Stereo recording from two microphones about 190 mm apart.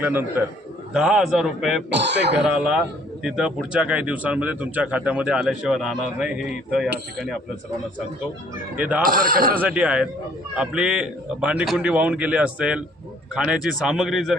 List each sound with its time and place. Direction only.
0.0 s speech: 10° right (ahead or behind)
1.9 s speech: 65° right (ahead or behind)
2.4 s speech: 5° right (ahead or behind)
8.7 s speech: 10° right (ahead or behind)
9.0 s speech: 50° right (ahead or behind)
9.6 s speech: 5° right (ahead or behind)